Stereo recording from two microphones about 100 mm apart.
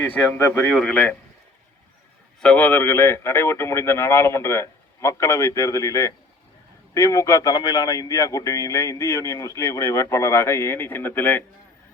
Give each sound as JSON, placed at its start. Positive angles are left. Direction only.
{"t": 0.0, "sound": "speech", "side_deg": 15}
{"t": 0.7, "sound": "speech", "side_deg": 5}
{"t": 2.4, "sound": "a man's voice", "side_deg": 15}